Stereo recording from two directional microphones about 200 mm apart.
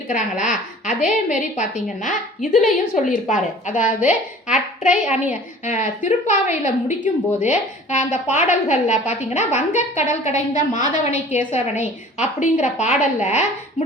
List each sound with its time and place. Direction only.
0.1 s a woman's voice: 40° left (ahead or behind)
3.8 s a child's voice: 5° right (ahead or behind)
4.5 s a woman's voice: 40° left (ahead or behind)